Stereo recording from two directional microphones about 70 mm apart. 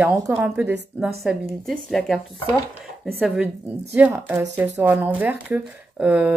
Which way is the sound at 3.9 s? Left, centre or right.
Right.